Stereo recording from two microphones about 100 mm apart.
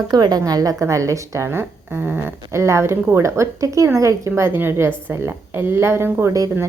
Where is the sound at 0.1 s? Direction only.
45° right (ahead or behind).